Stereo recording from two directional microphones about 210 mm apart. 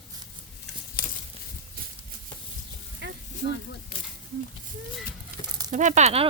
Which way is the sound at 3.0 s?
55° right (ahead or behind).